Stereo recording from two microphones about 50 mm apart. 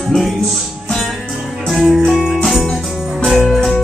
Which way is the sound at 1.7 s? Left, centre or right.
Centre.